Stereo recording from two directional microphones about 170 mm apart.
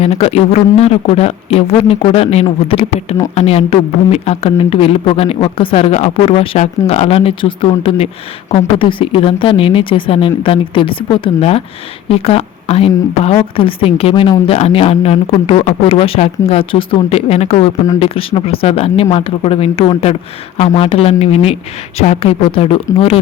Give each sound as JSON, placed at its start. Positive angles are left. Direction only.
{"t": 0.0, "sound": "speech", "side_deg": 35}